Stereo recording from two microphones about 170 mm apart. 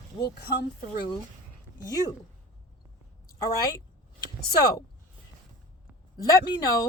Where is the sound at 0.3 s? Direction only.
65° left (ahead or behind).